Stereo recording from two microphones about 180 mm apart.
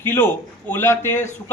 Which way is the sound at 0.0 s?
10° left (ahead or behind).